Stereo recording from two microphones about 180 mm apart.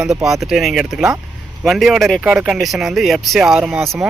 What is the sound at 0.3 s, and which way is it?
Speech, centre (ahead or behind).